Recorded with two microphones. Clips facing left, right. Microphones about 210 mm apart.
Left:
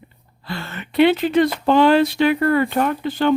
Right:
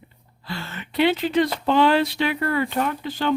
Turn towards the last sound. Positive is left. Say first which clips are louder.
# left 5 dB
turn(degrees=55)  # may be behind; listen again after turning